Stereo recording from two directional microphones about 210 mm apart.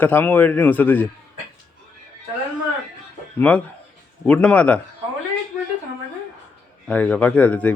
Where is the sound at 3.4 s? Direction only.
5° left (ahead or behind).